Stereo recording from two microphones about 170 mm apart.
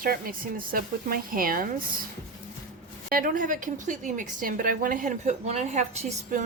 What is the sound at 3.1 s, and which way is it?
A woman's voice, 55° right (ahead or behind).